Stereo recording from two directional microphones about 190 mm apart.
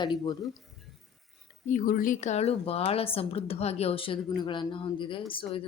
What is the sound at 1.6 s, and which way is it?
Speech, 45° left (ahead or behind).